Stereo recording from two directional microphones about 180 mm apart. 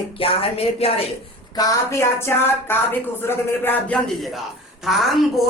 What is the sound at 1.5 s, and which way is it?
A woman's voice, 20° left (ahead or behind).